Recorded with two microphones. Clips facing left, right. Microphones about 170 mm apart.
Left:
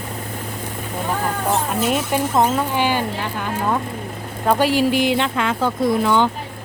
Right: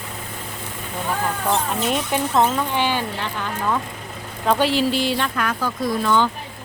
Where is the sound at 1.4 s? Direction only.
5° left (ahead or behind).